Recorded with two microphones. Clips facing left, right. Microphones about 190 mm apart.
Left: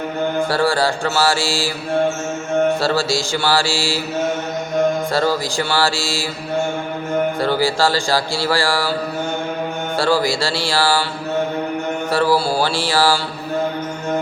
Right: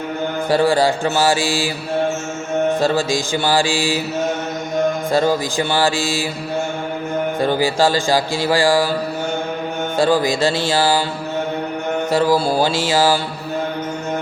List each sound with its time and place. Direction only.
0.5 s mantra: 15° right (ahead or behind)
2.8 s mantra: 15° right (ahead or behind)
5.1 s mantra: 15° right (ahead or behind)
7.3 s mantra: 15° right (ahead or behind)
10.0 s speech: 20° right (ahead or behind)
12.1 s mantra: 15° right (ahead or behind)